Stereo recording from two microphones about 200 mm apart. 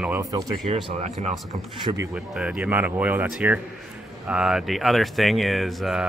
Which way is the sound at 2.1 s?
5° right (ahead or behind).